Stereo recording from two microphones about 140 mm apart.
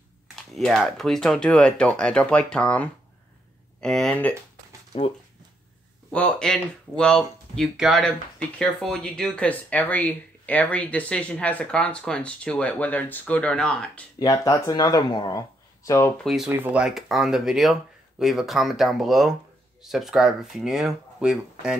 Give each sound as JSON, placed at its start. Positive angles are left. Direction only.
{"t": 0.6, "sound": "speech", "side_deg": 0}
{"t": 6.1, "sound": "speech", "side_deg": 5}
{"t": 14.2, "sound": "speech", "side_deg": 25}
{"t": 16.4, "sound": "speech", "side_deg": -10}